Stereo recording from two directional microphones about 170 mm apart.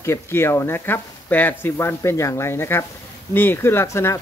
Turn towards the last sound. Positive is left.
turn(degrees=15)  # may be behind; listen again after turning